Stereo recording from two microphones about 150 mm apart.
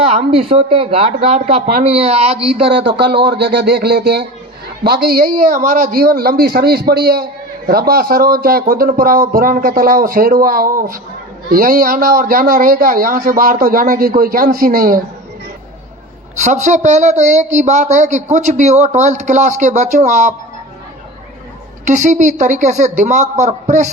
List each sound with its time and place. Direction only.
0.0 s speech: 40° right (ahead or behind)
3.2 s a man's voice: 90° right; by 15.0 s 70° right (ahead or behind)
16.3 s speech: 55° right (ahead or behind)
21.8 s speech: 55° right (ahead or behind)